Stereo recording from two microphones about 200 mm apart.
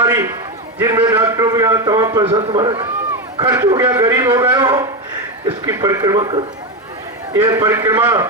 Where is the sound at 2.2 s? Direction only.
30° right (ahead or behind).